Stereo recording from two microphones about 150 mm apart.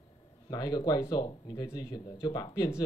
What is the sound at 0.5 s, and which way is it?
Speech, 25° left (ahead or behind).